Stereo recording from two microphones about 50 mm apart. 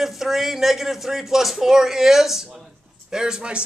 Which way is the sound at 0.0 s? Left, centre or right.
Centre.